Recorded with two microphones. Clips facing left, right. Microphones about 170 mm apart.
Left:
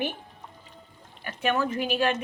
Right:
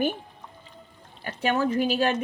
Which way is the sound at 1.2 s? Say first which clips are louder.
Right 2 dB; 35° right (ahead or behind).